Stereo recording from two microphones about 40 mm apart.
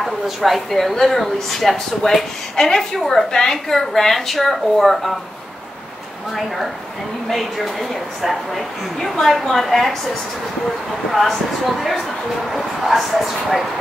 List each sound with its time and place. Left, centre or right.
0.0 s a woman's voice: centre
7.2 s speech: centre
12.4 s speech: centre